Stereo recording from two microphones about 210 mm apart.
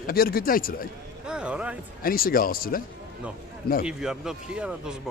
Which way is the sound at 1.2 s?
5° right (ahead or behind).